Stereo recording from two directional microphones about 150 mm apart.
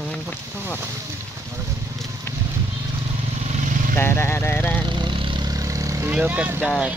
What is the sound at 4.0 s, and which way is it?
Speech, 15° left (ahead or behind).